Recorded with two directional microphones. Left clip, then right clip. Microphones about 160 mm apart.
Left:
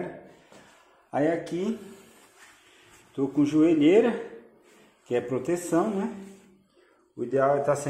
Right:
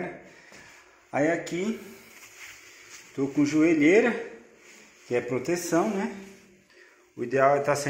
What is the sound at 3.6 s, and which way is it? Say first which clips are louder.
Speech: even; 10° left (ahead or behind).